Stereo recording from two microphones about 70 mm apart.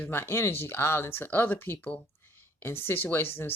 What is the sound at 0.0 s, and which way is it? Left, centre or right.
Speech, left.